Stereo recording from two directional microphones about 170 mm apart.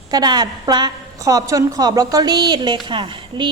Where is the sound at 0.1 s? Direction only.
25° right (ahead or behind).